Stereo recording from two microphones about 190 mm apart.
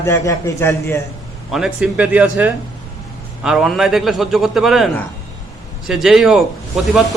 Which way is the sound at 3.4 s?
Centre (ahead or behind).